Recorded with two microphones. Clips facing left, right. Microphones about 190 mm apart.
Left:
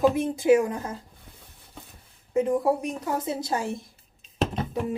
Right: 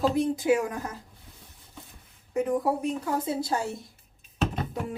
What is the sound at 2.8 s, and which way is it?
Speech, 20° left (ahead or behind).